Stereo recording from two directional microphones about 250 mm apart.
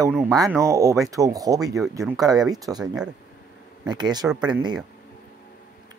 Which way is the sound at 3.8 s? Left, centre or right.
Centre.